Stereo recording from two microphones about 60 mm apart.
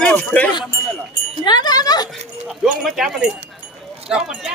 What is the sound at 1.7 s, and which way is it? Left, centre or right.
Speech, left.